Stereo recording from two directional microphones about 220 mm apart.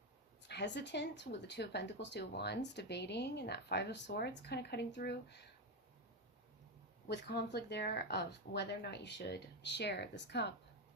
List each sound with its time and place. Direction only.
0.4 s speech: 50° left (ahead or behind)
7.1 s speech: 50° left (ahead or behind)